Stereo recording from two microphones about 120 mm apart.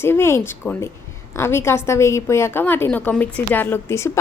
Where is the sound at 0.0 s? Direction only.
20° left (ahead or behind).